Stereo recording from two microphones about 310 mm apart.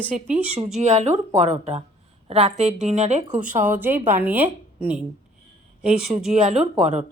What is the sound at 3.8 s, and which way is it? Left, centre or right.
Speech, centre.